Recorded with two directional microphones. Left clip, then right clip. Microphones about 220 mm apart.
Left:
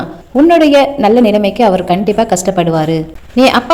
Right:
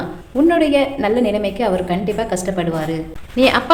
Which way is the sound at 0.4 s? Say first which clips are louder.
Left 7 dB; 30° left (ahead or behind).